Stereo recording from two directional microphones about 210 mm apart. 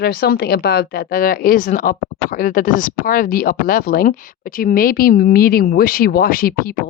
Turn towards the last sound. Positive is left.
turn(degrees=45)  # may be behind; listen again after turning